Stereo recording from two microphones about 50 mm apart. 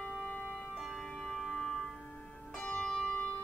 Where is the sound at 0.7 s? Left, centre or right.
Centre.